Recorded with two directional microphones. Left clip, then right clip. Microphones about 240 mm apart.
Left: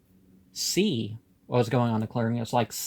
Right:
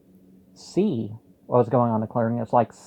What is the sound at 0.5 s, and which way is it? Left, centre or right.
Speech, left.